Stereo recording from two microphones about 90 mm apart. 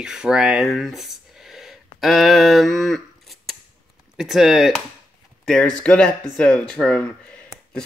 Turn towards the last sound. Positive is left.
turn(degrees=10)  # may be behind; listen again after turning